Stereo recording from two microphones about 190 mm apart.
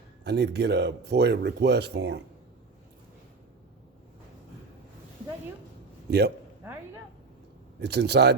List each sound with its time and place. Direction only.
0.3 s speech: 60° right (ahead or behind)
6.1 s speech: 60° right (ahead or behind)
7.8 s speech: 60° right (ahead or behind)